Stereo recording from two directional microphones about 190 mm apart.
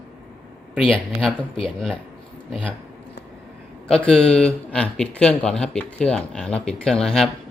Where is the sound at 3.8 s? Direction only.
5° left (ahead or behind).